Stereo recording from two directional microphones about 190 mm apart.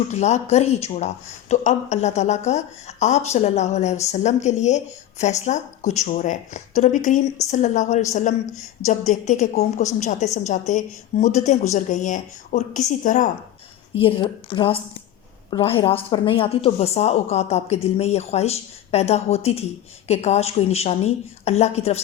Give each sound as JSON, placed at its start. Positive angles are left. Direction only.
{"t": 0.1, "sound": "speech", "side_deg": 35}
{"t": 14.0, "sound": "speech", "side_deg": 25}